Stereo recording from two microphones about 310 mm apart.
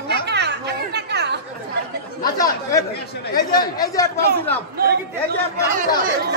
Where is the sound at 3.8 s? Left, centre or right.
Centre.